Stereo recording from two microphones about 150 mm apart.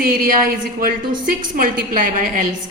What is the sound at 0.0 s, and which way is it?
A woman's voice, 75° right (ahead or behind).